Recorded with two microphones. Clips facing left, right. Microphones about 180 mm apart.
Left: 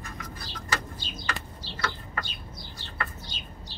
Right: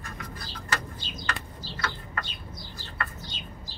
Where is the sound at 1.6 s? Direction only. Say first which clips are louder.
Right 1 dB; 70° left (ahead or behind).